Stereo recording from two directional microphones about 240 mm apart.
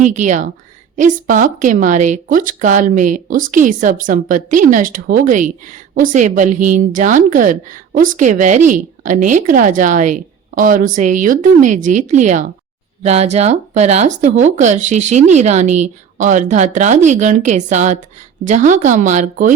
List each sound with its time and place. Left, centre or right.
0.0 s a woman's voice: right